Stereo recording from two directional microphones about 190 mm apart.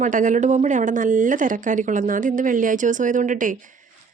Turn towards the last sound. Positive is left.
turn(degrees=-45)  # may be behind; listen again after turning